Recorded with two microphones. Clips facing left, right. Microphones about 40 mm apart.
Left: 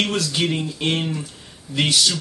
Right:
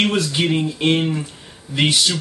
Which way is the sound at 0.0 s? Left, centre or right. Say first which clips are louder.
Right 3 dB; centre.